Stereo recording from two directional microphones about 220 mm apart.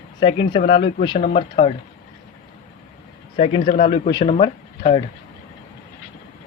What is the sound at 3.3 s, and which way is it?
Speech, 25° left (ahead or behind).